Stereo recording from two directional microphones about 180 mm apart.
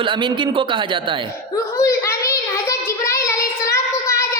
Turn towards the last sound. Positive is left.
turn(degrees=15)  # may be behind; listen again after turning